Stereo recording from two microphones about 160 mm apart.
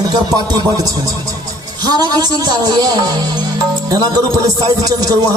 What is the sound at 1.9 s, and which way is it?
Speech, 25° right (ahead or behind).